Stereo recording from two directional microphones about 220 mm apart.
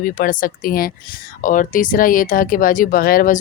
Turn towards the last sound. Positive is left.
turn(degrees=40)  # may be behind; listen again after turning